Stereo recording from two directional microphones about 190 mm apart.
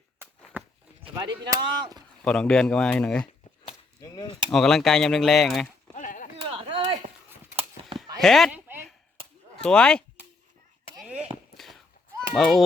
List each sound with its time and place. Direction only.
0.5 s walk: 10° right (ahead or behind)
1.1 s speech: 20° right (ahead or behind)
2.2 s speech: 5° left (ahead or behind)
4.0 s speech: 20° left (ahead or behind)
4.4 s speech: centre (ahead or behind)
5.9 s a sound: 40° left (ahead or behind)
6.4 s chop: 30° right (ahead or behind)
8.2 s chop: centre (ahead or behind)
9.6 s speech: 5° left (ahead or behind)
10.9 s firecracker: 5° right (ahead or behind)
11.5 s a sound: centre (ahead or behind)
12.3 s speech: centre (ahead or behind)